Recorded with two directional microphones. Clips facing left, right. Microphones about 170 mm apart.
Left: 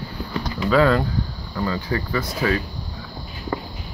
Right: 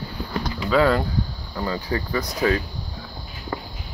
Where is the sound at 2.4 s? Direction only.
35° right (ahead or behind).